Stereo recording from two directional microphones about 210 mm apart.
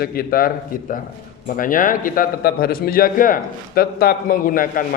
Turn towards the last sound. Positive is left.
turn(degrees=40)  # may be behind; listen again after turning